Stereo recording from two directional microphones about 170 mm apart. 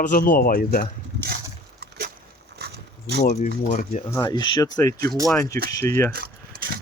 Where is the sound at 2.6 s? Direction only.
70° right (ahead or behind).